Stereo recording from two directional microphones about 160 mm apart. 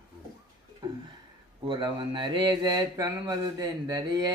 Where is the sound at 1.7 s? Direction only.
30° right (ahead or behind).